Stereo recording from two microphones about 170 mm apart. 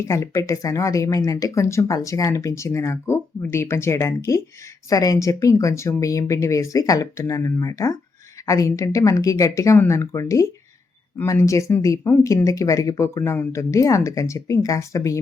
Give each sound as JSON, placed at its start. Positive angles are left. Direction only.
{"t": 0.0, "sound": "speech", "side_deg": 20}